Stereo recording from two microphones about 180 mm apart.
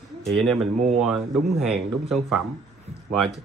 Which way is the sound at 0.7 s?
40° right (ahead or behind).